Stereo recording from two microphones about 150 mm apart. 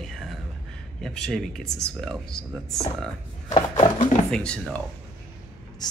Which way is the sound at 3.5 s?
30° left (ahead or behind).